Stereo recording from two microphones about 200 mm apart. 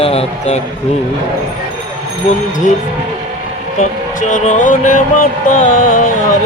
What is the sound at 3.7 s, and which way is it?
Music, 40° left (ahead or behind).